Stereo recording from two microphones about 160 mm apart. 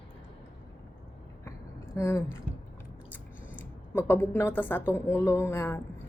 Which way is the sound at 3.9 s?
10° left (ahead or behind).